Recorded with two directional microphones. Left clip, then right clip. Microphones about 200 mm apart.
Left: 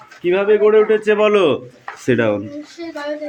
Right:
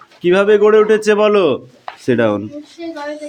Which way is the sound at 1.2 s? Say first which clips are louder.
Right 1 dB; 15° right (ahead or behind).